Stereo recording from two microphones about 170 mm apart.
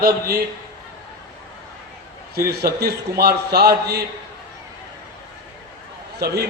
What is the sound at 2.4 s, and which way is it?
A man's voice, 65° right (ahead or behind).